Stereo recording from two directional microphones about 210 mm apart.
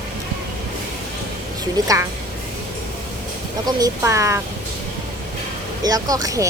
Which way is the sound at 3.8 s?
15° right (ahead or behind).